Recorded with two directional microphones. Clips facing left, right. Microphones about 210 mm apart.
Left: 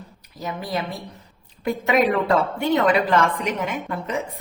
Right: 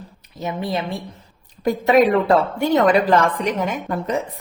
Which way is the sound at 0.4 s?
25° right (ahead or behind).